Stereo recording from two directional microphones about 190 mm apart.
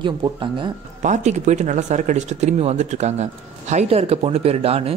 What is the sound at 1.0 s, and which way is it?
Speech, 40° right (ahead or behind).